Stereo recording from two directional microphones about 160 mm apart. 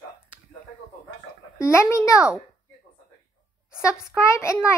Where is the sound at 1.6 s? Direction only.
15° left (ahead or behind).